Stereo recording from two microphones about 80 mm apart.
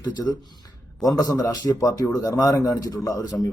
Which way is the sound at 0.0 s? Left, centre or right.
Left.